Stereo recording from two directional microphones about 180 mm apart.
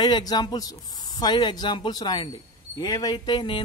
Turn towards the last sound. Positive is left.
turn(degrees=25)  # may be behind; listen again after turning